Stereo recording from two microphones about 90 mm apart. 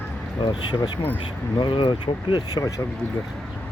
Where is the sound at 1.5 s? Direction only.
65° left (ahead or behind); by 2.8 s 40° left (ahead or behind).